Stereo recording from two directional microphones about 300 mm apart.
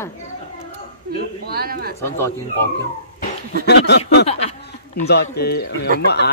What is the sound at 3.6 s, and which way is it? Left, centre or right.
Speech, left.